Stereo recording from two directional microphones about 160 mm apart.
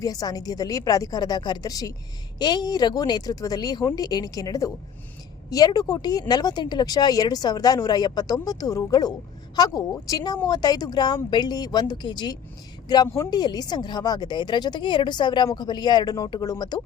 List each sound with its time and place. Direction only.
0.0 s speech: 20° left (ahead or behind)